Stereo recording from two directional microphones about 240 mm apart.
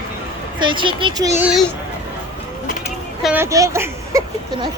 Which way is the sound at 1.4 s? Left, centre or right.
Centre.